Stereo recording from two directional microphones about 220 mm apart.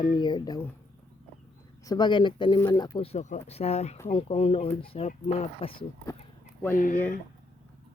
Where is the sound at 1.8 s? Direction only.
20° left (ahead or behind).